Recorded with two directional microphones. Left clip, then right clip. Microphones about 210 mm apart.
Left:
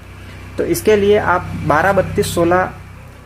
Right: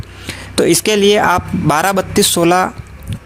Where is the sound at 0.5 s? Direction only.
40° right (ahead or behind).